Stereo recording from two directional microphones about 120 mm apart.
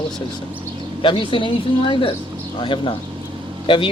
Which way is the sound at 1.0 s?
45° left (ahead or behind).